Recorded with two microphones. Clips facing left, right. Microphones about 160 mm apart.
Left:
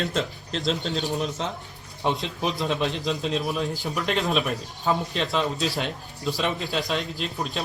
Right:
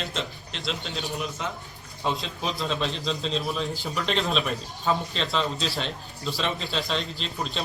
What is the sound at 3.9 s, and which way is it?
Speech, centre (ahead or behind).